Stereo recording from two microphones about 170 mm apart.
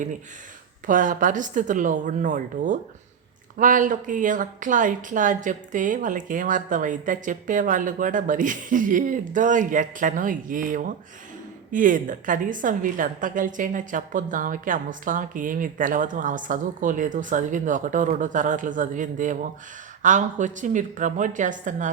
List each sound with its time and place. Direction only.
0.9 s a woman's voice: 50° right (ahead or behind)